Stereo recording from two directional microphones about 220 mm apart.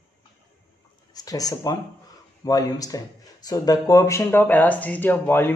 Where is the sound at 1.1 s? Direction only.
15° left (ahead or behind).